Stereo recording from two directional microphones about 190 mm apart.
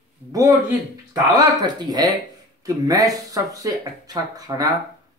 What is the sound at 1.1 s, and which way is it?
Speech, 20° right (ahead or behind).